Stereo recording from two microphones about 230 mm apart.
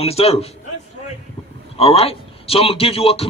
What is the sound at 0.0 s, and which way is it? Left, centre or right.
Speech, left.